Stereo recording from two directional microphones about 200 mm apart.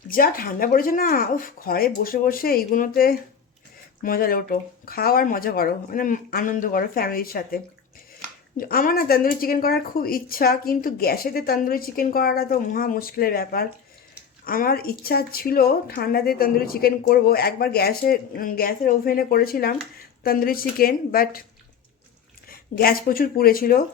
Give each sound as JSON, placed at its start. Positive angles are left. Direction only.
{"t": 0.1, "sound": "speech", "side_deg": 45}
{"t": 22.4, "sound": "speech", "side_deg": 45}